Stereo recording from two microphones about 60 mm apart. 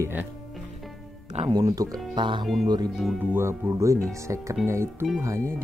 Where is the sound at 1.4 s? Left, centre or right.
Right.